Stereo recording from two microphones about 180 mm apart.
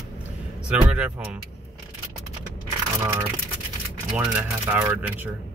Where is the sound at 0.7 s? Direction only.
5° right (ahead or behind).